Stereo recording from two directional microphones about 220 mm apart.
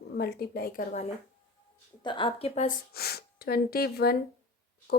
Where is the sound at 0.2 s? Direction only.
45° left (ahead or behind).